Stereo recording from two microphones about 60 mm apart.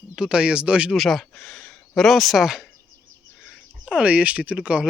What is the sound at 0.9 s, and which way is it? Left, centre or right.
Speech, centre.